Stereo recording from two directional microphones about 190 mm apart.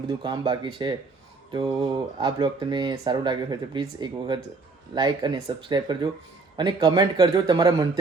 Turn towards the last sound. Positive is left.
turn(degrees=-20)  # may be behind; listen again after turning